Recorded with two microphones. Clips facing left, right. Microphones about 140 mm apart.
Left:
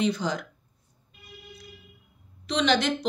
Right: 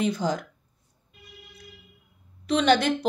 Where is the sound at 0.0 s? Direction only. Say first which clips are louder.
Right 1 dB; 45° right (ahead or behind).